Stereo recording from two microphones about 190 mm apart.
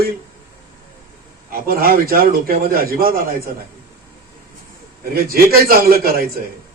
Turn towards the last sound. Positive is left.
turn(degrees=-50)  # may be behind; listen again after turning